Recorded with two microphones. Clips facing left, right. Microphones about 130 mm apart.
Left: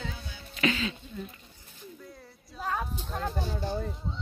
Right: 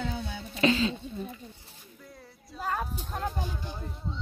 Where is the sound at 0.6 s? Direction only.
30° right (ahead or behind).